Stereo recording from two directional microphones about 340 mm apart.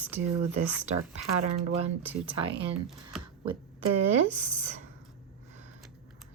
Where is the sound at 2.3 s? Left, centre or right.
Centre.